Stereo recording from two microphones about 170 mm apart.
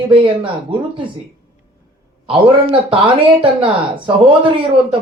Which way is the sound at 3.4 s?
30° right (ahead or behind).